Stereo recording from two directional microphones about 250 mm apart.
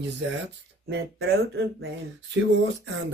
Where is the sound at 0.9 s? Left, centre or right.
Right.